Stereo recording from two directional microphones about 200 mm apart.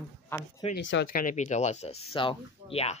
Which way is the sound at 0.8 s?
65° left (ahead or behind).